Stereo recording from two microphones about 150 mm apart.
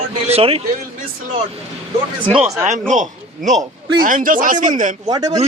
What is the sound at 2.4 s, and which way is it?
Speech, 15° right (ahead or behind).